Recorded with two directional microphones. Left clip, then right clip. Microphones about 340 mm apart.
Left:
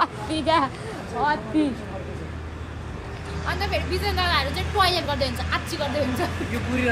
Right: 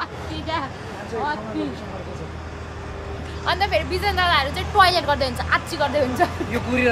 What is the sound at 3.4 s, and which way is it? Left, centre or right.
A woman's voice, centre.